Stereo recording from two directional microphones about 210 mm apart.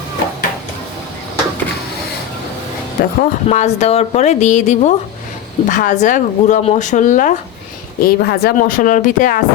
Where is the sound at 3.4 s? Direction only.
30° left (ahead or behind).